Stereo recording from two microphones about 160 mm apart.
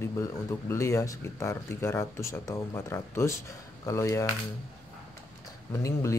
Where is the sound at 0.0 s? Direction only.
20° left (ahead or behind).